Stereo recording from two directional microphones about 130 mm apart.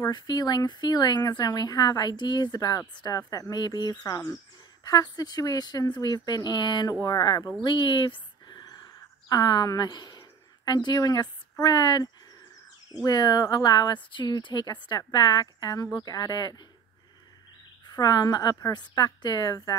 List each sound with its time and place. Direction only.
0.0 s speech: 30° left (ahead or behind)
7.6 s a sound: 40° left (ahead or behind)
13.0 s speech: 30° left (ahead or behind)
17.8 s speech: 30° left (ahead or behind)